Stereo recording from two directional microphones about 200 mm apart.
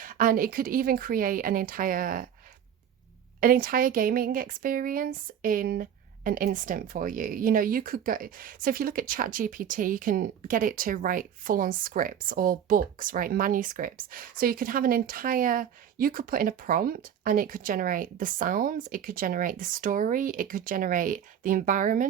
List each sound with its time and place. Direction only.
0.0 s speech: 45° right (ahead or behind)
3.4 s speech: 45° right (ahead or behind)